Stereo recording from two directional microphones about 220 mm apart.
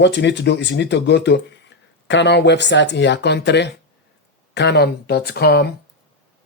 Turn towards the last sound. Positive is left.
turn(degrees=45)  # may be behind; listen again after turning